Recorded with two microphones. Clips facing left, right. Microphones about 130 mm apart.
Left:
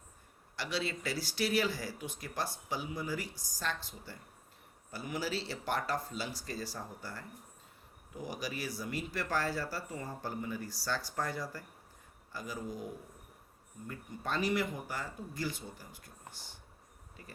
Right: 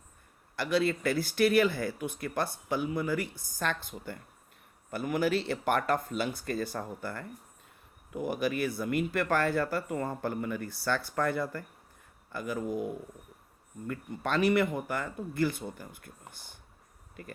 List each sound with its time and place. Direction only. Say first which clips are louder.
0.5 s speech: right 9 dB; 55° right (ahead or behind)
13.8 s speech: right 6 dB; 70° right (ahead or behind)